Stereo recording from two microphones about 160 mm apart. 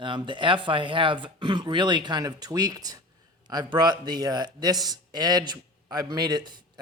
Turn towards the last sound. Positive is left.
turn(degrees=-25)  # may be behind; listen again after turning